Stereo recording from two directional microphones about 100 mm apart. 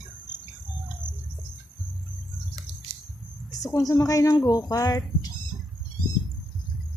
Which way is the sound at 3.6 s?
35° left (ahead or behind).